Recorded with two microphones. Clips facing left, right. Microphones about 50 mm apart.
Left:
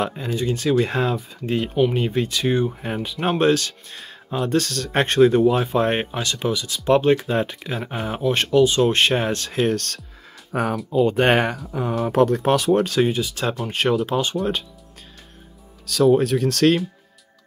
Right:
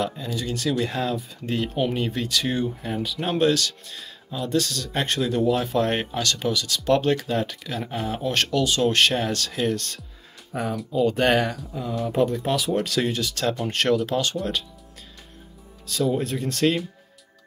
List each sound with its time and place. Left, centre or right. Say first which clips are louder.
0.0 s speech: left 4 dB; left
10.5 s speech: left 5 dB; left
10.9 s speech: left 3 dB; left
11.3 s speech: left 3 dB; left
11.6 s speech: left 5 dB; left
12.8 s speech: left 5 dB; left
13.1 s speech: left 1 dB; centre
14.0 s speech: left 2 dB; left
15.8 s speech: left 8 dB; left